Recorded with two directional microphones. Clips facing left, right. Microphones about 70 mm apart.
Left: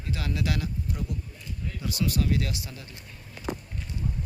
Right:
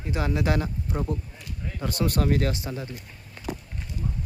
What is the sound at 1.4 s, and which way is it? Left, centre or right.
Speech, right.